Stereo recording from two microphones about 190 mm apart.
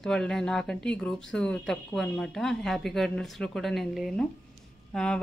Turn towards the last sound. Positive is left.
turn(degrees=5)  # may be behind; listen again after turning